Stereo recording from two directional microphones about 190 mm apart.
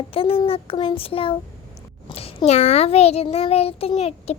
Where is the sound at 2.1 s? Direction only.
30° left (ahead or behind).